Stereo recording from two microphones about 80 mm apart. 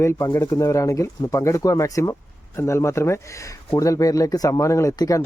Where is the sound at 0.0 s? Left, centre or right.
Left.